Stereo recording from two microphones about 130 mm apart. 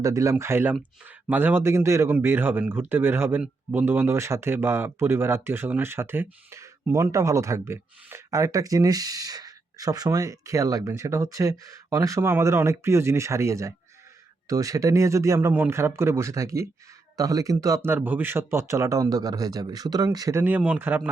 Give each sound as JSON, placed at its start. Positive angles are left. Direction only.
{"t": 0.0, "sound": "speech", "side_deg": -25}
{"t": 20.4, "sound": "speech", "side_deg": -15}